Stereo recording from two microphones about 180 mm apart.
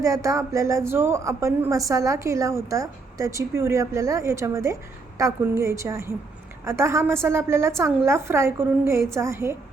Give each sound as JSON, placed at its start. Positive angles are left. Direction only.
{"t": 0.0, "sound": "a woman's voice", "side_deg": -15}